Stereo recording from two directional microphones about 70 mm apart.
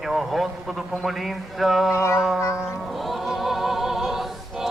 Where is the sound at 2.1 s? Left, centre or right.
Centre.